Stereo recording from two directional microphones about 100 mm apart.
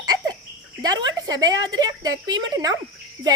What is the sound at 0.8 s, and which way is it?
Speech, 45° right (ahead or behind).